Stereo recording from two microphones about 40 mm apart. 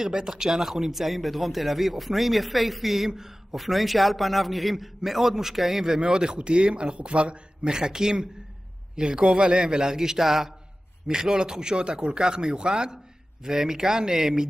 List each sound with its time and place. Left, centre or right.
0.1 s a man's voice: centre